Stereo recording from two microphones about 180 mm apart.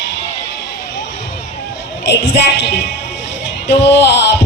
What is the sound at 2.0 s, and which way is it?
Music, 70° left (ahead or behind).